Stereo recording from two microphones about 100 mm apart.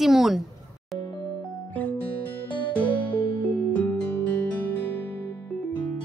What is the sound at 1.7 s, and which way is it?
Music, 15° left (ahead or behind).